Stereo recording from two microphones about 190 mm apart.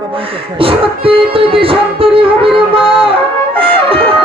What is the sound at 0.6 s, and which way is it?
Music, 30° right (ahead or behind).